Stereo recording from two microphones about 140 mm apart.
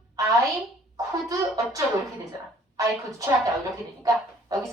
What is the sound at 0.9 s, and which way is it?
Speech, 25° right (ahead or behind).